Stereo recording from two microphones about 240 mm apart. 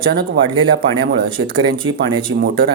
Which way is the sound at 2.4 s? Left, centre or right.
Right.